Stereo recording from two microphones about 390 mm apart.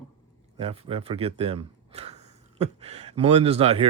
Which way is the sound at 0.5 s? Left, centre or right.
Centre.